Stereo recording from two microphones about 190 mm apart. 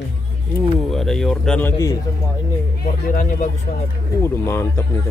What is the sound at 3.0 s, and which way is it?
Speech, 50° left (ahead or behind).